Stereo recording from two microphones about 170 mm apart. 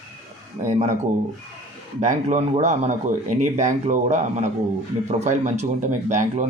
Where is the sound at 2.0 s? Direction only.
45° right (ahead or behind).